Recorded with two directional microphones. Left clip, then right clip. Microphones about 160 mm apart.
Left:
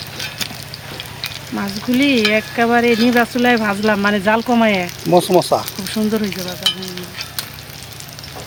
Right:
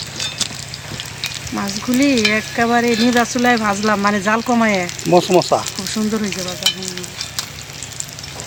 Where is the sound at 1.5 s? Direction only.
35° left (ahead or behind).